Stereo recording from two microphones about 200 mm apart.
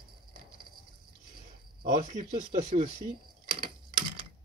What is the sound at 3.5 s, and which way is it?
Typewriter, 45° right (ahead or behind).